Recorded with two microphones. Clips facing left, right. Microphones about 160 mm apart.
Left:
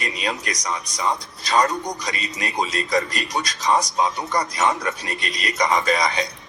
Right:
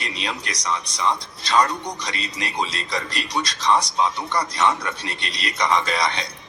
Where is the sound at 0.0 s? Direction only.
45° left (ahead or behind).